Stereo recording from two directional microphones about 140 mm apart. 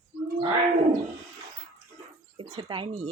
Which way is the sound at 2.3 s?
35° right (ahead or behind).